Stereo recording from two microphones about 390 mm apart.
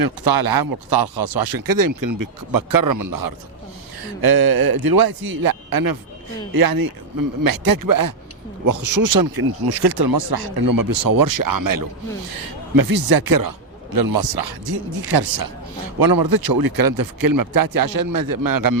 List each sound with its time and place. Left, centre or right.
0.0 s speech: right
4.0 s speech: right